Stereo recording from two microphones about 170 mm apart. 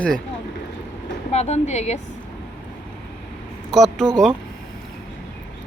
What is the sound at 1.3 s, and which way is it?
Speech, 40° left (ahead or behind).